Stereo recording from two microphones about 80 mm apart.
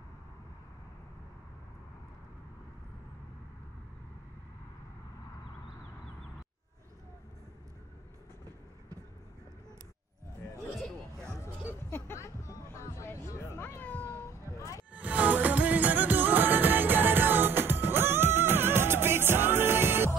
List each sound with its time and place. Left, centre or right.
10.7 s hubbub: centre
11.9 s music: left
13.7 s cat: left
14.2 s a sound: left
14.9 s music: centre